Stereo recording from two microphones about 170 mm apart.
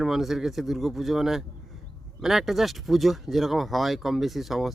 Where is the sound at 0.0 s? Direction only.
Centre (ahead or behind).